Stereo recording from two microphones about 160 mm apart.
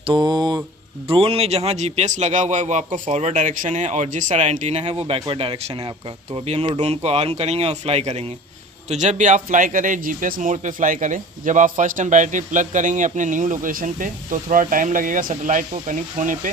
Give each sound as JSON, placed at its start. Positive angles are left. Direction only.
{"t": 0.0, "sound": "mantra", "side_deg": -30}
{"t": 1.0, "sound": "speech", "side_deg": -35}